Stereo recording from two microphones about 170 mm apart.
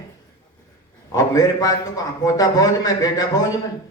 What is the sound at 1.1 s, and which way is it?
Speech, 20° left (ahead or behind).